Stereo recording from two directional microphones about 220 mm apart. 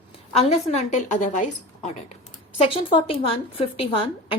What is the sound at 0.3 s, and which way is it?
A woman's voice, 30° left (ahead or behind).